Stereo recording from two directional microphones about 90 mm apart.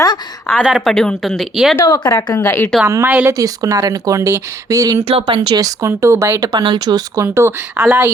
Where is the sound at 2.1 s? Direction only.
30° left (ahead or behind).